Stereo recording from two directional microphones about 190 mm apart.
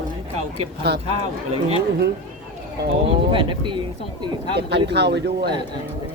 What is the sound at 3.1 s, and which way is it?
Speech, 25° right (ahead or behind).